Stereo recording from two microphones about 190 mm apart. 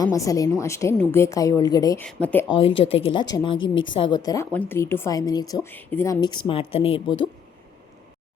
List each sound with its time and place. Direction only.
0.0 s speech: 15° left (ahead or behind)
2.0 s speech: 10° left (ahead or behind)
2.7 s a woman's voice: 30° left (ahead or behind)